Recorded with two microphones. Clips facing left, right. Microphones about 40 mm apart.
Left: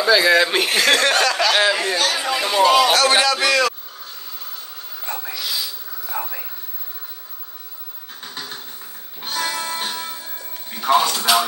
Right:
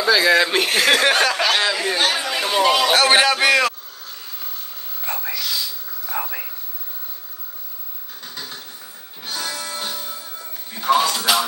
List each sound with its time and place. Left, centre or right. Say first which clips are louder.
0.0 s speech: left 1 dB; centre
1.6 s speech: left 3 dB; centre
2.0 s speech: right 1 dB; right
2.3 s speech: left 1 dB; centre
2.9 s a man's voice: right 1 dB; right
5.3 s whispering: even; centre
6.1 s a sound: right 1 dB; right
9.2 s music: left 4 dB; left
10.8 s speech: left 1 dB; centre